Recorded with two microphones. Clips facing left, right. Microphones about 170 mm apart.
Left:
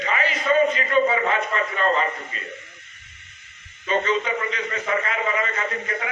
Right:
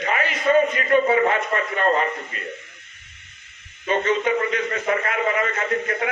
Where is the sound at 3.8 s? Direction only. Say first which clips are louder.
Right 2 dB; 50° right (ahead or behind).